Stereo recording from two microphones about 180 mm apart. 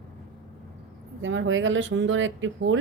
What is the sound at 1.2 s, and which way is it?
Speech, 90° right.